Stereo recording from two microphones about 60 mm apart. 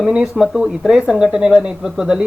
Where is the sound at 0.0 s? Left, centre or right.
Centre.